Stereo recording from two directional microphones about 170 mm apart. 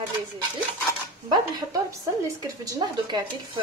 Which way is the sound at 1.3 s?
20° right (ahead or behind).